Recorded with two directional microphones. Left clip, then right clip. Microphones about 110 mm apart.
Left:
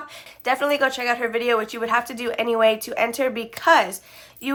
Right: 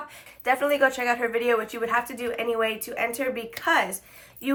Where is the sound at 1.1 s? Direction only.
15° left (ahead or behind).